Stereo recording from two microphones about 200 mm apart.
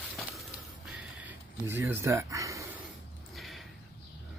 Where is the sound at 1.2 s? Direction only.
10° right (ahead or behind).